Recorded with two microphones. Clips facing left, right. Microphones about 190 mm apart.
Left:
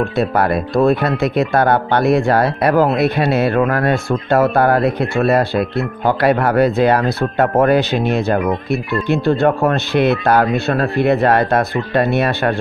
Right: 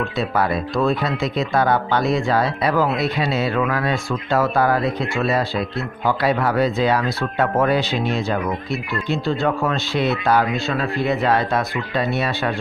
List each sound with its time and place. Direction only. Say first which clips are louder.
0.2 s speech: left 4 dB; 60° left (ahead or behind)